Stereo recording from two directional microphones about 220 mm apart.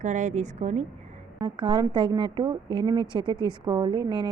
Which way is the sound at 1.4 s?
20° right (ahead or behind).